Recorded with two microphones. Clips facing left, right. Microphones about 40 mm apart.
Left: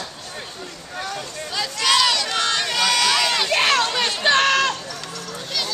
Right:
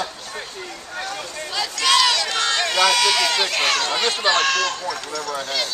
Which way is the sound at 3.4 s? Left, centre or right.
Centre.